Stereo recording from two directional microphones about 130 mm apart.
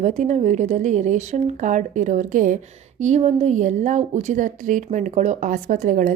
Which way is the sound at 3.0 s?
60° right (ahead or behind).